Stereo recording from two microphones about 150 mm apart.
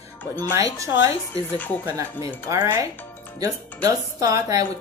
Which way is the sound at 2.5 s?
20° right (ahead or behind).